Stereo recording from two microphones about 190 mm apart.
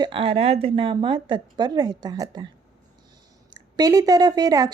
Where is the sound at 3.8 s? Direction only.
20° right (ahead or behind).